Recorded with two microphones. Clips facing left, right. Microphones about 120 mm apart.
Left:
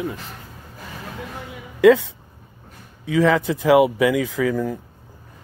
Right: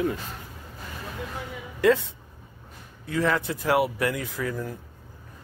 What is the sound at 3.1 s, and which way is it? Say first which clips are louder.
Speech: left 7 dB; 90° left.